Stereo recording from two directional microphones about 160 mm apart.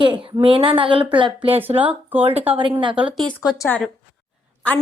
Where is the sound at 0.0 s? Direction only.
30° right (ahead or behind).